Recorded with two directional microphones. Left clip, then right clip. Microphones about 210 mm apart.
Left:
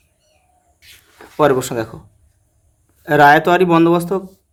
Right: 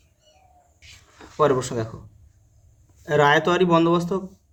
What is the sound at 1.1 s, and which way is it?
Speech, 30° left (ahead or behind).